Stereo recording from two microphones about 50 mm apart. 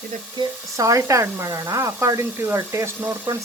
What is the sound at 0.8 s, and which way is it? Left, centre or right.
Speech, right.